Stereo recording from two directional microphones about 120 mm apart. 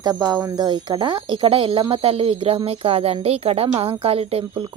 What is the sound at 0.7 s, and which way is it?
Speech, 40° right (ahead or behind).